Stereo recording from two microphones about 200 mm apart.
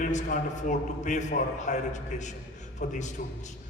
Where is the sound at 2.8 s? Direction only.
35° left (ahead or behind).